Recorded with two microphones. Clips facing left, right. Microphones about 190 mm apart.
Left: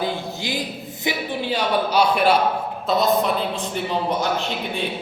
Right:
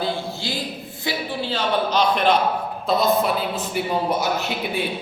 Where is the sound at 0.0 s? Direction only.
15° left (ahead or behind).